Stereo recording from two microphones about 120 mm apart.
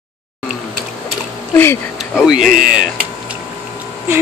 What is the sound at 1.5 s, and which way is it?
Speech, 20° left (ahead or behind).